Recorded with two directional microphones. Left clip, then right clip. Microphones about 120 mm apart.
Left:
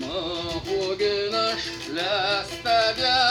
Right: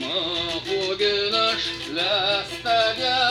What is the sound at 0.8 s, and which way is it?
Music, 40° left (ahead or behind).